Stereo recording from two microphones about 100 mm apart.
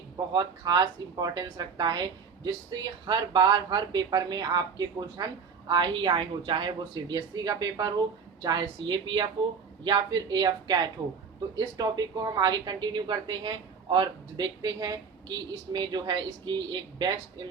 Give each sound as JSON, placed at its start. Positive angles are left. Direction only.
{"t": 0.3, "sound": "a woman's voice", "side_deg": -45}